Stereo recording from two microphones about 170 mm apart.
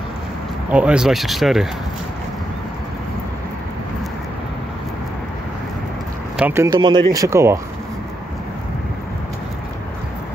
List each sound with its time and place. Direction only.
0.7 s speech: 5° right (ahead or behind)
6.3 s speech: 10° right (ahead or behind)
6.8 s speech: 25° right (ahead or behind)